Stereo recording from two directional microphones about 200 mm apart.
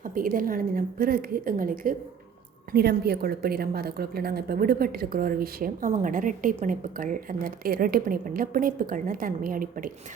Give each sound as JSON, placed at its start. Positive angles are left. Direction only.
{"t": 0.0, "sound": "a woman's voice", "side_deg": -45}